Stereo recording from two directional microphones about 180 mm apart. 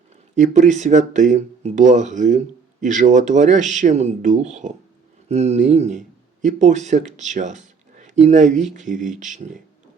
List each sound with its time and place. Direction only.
0.3 s speech: 40° right (ahead or behind)